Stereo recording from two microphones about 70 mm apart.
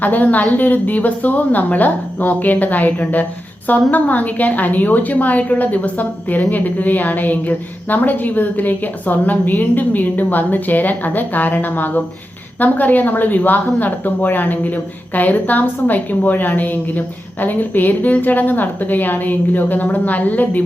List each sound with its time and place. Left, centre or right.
0.0 s a woman's voice: left